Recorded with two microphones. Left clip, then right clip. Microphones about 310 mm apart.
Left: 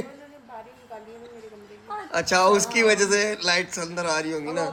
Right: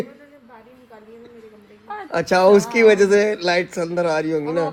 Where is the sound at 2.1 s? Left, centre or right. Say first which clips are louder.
Right 5 dB; centre.